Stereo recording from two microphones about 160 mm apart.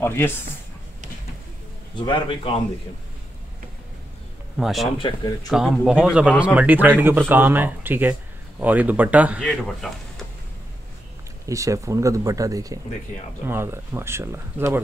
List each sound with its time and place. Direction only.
0.0 s speech: 15° left (ahead or behind)
2.0 s a man's voice: 30° left (ahead or behind)
4.6 s speech: centre (ahead or behind)
4.9 s speech: 25° left (ahead or behind)
5.5 s speech: centre (ahead or behind)
9.4 s speech: 5° left (ahead or behind)
11.4 s speech: 20° right (ahead or behind)